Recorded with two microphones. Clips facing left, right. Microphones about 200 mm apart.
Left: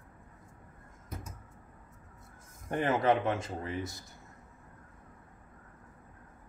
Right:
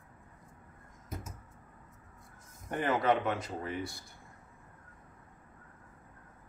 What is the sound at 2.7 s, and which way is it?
A man's voice, 25° left (ahead or behind).